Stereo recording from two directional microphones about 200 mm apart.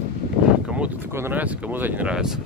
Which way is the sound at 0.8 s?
10° right (ahead or behind).